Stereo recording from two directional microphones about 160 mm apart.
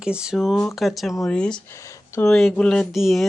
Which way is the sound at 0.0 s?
5° right (ahead or behind).